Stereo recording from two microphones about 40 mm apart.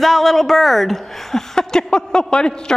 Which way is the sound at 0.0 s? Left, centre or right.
Centre.